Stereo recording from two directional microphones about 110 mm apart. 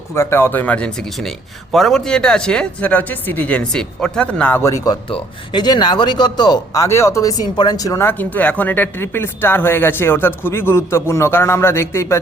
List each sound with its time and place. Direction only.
0.1 s speech: 20° left (ahead or behind)
4.6 s speech: 30° left (ahead or behind)
5.0 s speech: 50° left (ahead or behind)
6.8 s speech: 25° left (ahead or behind)
8.0 s speech: 15° left (ahead or behind)